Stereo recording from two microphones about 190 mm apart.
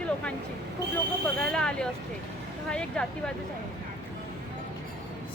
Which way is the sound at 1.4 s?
5° left (ahead or behind).